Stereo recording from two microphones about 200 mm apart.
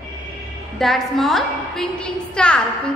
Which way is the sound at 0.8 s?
Centre (ahead or behind).